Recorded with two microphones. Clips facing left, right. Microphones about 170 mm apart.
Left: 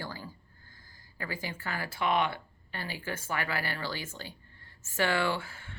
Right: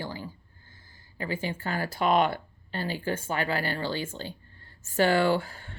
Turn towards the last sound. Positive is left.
turn(degrees=-35)  # may be behind; listen again after turning